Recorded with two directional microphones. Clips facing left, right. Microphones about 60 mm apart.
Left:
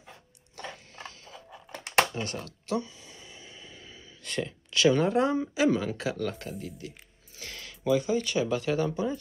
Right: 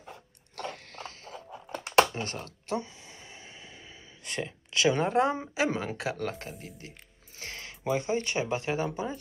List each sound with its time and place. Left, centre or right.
0.6 s mechanisms: right
2.1 s a sound: right
4.2 s speech: right